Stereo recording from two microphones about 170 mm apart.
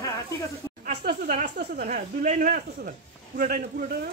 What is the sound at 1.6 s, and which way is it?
Speech, 55° right (ahead or behind).